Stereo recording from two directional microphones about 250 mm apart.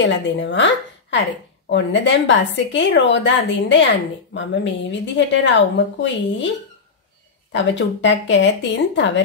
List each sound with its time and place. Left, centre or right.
0.0 s a woman's voice: left
7.5 s speech: left